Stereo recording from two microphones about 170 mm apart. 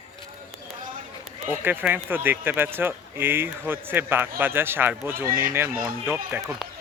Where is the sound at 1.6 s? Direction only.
10° right (ahead or behind).